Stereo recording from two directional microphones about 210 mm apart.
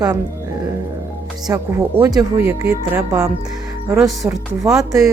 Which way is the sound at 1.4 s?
15° right (ahead or behind).